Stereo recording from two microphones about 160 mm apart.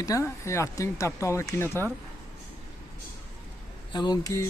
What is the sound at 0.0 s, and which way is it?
Speech, 20° left (ahead or behind).